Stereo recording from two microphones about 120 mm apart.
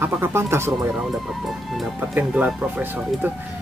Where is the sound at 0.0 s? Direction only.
20° right (ahead or behind).